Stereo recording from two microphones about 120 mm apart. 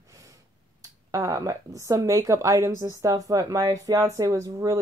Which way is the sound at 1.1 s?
30° right (ahead or behind).